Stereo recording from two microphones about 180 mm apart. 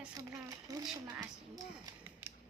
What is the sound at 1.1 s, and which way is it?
Speech, 20° right (ahead or behind).